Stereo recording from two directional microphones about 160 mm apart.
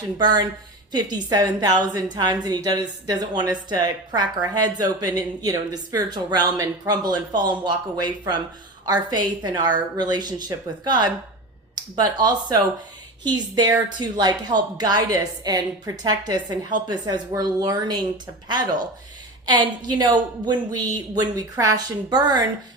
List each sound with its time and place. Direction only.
0.2 s a woman's voice: 25° right (ahead or behind)
19.5 s a woman's voice: 30° right (ahead or behind)